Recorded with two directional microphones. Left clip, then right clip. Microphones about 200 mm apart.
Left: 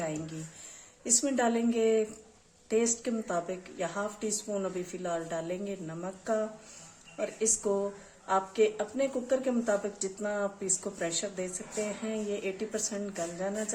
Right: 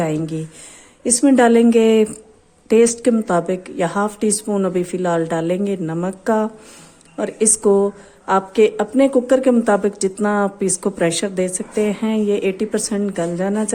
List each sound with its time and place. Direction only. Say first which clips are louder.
1.0 s speech: right 15 dB; 45° right (ahead or behind)